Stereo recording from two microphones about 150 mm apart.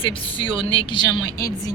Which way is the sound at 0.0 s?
35° left (ahead or behind).